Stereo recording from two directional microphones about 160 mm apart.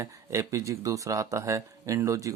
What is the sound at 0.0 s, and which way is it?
Speech, 20° right (ahead or behind).